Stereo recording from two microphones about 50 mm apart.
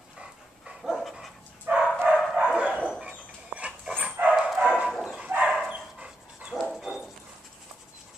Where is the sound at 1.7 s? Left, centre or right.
Right.